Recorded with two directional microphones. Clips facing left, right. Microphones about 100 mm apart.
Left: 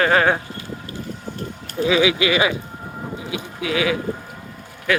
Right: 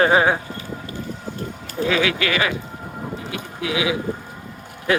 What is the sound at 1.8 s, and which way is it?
Speech, 10° left (ahead or behind).